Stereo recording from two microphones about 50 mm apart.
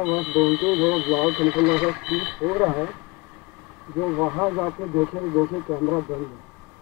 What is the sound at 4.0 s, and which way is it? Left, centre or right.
Speech, centre.